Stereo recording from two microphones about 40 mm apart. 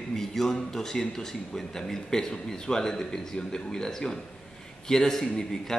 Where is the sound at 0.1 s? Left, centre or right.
Centre.